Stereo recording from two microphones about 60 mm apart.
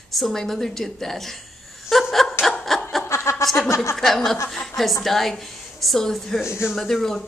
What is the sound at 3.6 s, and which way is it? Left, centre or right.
Speech, left.